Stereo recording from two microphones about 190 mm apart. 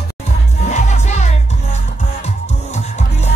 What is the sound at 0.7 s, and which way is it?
Music, 35° left (ahead or behind).